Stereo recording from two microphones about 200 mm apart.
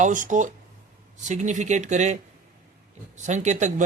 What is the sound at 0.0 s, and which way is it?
Speech, 40° right (ahead or behind).